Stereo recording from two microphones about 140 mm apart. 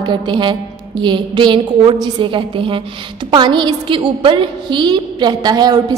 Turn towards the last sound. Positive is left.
turn(degrees=-30)  # may be behind; listen again after turning